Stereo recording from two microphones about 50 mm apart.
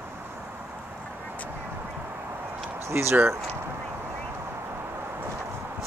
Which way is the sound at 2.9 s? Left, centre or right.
Right.